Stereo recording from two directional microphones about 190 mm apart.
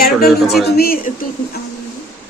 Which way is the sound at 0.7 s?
55° left (ahead or behind).